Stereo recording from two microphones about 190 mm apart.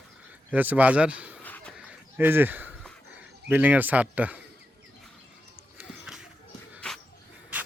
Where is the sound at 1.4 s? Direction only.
10° left (ahead or behind).